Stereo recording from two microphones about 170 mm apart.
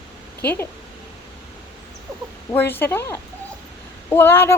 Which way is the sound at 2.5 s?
10° left (ahead or behind).